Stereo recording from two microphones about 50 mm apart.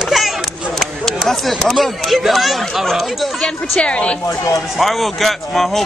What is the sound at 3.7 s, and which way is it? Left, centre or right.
Speech, left.